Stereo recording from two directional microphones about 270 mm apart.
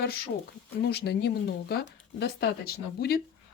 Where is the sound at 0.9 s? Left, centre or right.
Left.